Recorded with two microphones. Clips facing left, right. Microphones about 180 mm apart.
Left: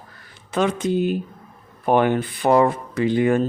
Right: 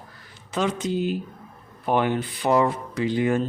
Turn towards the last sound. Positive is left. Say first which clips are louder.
# left 4 dB
turn(degrees=55)  # may be behind; listen again after turning